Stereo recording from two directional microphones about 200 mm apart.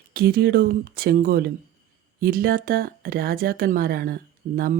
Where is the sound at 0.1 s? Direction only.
50° right (ahead or behind).